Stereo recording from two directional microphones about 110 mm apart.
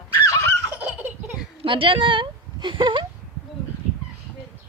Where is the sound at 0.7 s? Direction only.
15° right (ahead or behind).